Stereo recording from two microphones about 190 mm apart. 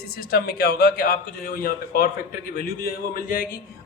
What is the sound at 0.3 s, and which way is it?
A man's voice, 55° left (ahead or behind).